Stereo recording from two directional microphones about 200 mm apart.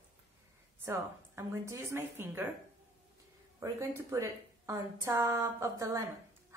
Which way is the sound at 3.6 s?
15° right (ahead or behind).